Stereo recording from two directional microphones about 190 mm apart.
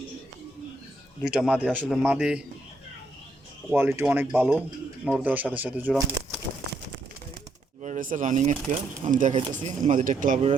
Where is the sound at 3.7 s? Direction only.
10° right (ahead or behind).